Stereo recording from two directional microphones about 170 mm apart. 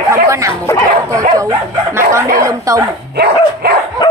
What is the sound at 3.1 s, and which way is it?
Dog, 70° right (ahead or behind).